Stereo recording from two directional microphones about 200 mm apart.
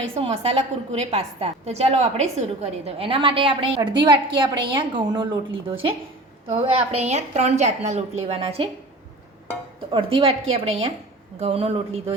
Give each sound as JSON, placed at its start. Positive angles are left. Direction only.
{"t": 0.1, "sound": "a woman's voice", "side_deg": -30}
{"t": 9.9, "sound": "a woman's voice", "side_deg": -25}